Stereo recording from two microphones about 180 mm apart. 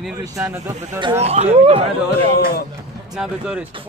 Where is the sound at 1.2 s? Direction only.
35° right (ahead or behind).